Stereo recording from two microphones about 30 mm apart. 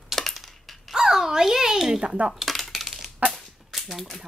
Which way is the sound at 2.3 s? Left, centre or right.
Centre.